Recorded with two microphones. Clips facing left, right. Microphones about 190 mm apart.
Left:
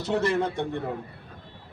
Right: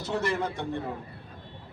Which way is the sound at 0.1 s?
25° left (ahead or behind).